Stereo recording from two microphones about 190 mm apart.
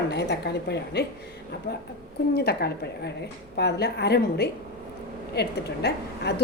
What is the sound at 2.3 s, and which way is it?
A woman's voice, 55° left (ahead or behind).